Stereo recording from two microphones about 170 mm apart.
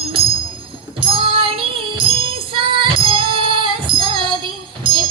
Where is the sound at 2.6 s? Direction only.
30° right (ahead or behind).